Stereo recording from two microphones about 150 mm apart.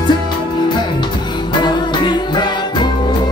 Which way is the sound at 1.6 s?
30° left (ahead or behind).